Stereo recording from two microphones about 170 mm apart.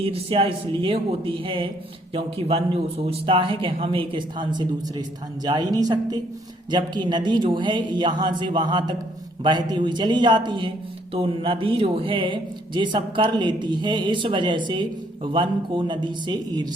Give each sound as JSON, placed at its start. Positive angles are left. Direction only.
{"t": 0.0, "sound": "a man's voice", "side_deg": -35}